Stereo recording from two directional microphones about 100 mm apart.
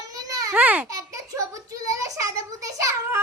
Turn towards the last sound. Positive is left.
turn(degrees=-30)  # may be behind; listen again after turning